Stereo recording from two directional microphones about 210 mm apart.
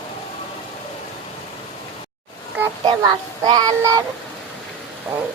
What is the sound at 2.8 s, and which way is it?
Speech, 20° right (ahead or behind).